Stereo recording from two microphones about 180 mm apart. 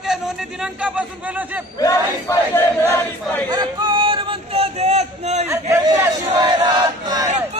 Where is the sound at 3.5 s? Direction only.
25° right (ahead or behind).